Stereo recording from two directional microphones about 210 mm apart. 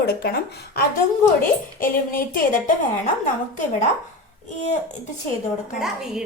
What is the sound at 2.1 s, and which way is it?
Speech, 45° left (ahead or behind).